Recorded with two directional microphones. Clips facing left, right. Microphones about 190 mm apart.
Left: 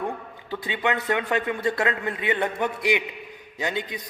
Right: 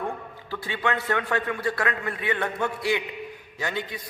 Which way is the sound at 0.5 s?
20° left (ahead or behind).